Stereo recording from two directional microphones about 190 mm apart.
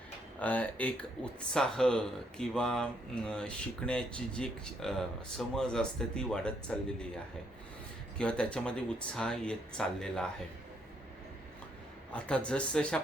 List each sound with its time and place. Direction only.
0.3 s speech: 10° left (ahead or behind)
8.2 s speech: 5° left (ahead or behind)
12.1 s speech: 5° left (ahead or behind)